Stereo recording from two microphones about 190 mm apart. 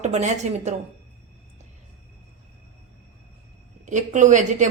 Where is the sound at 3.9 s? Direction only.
40° right (ahead or behind).